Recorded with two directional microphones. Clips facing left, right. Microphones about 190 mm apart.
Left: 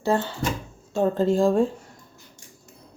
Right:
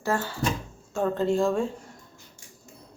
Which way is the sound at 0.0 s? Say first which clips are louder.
Left 4 dB; 20° left (ahead or behind).